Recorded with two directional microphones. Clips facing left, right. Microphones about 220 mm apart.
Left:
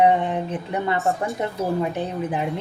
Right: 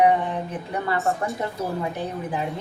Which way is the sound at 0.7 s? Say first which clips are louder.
Left 1 dB; 20° left (ahead or behind).